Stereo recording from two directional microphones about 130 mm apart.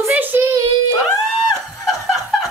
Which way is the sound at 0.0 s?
15° right (ahead or behind).